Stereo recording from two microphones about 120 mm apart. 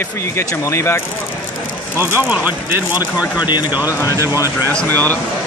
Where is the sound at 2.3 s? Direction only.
15° right (ahead or behind).